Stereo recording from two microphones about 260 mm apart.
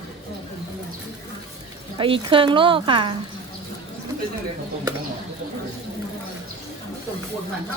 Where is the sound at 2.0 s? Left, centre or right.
Centre.